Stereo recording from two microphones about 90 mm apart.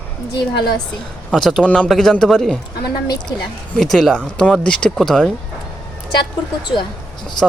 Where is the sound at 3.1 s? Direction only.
55° left (ahead or behind).